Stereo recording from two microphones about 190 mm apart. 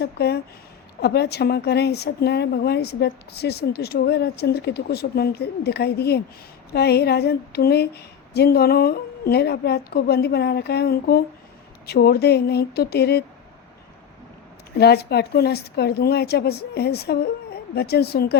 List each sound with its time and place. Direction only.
0.0 s speech: 60° left (ahead or behind)
14.8 s speech: 60° left (ahead or behind)